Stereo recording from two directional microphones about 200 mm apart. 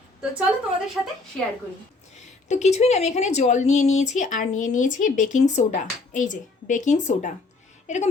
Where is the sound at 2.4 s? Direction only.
35° left (ahead or behind).